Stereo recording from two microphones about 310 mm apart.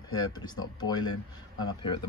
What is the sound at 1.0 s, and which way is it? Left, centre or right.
Speech, left.